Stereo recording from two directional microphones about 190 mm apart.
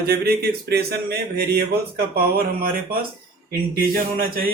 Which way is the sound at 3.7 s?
50° right (ahead or behind).